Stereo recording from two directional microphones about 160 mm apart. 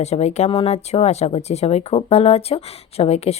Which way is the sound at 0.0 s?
45° left (ahead or behind).